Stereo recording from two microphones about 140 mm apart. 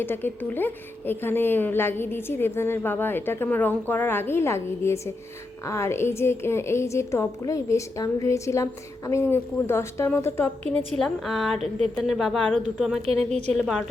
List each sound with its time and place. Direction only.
0.0 s a woman's voice: 15° left (ahead or behind)
10.7 s a woman's voice: 5° left (ahead or behind)
13.1 s a woman's voice: 50° right (ahead or behind)